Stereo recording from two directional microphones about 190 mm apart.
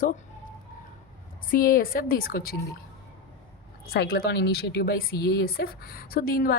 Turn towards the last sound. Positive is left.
turn(degrees=50)  # may be behind; listen again after turning